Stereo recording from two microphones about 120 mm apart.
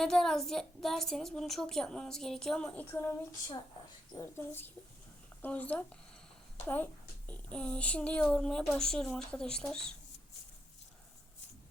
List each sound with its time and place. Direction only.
0.0 s a woman's voice: 5° left (ahead or behind)
2.9 s speech: 20° left (ahead or behind); by 9.9 s 5° left (ahead or behind)